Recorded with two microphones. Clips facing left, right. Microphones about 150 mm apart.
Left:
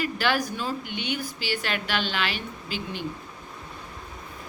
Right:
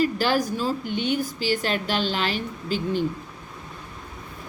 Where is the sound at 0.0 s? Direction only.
40° right (ahead or behind).